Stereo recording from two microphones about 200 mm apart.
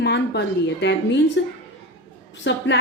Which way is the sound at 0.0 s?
60° left (ahead or behind).